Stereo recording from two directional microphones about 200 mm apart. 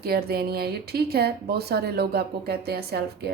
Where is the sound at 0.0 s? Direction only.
50° right (ahead or behind).